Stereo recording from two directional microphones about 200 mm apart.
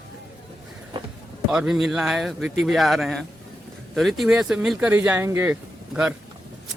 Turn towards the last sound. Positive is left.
turn(degrees=-5)  # may be behind; listen again after turning